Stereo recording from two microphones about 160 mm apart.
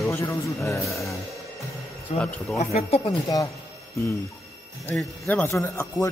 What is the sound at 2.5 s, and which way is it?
Speech, 40° left (ahead or behind).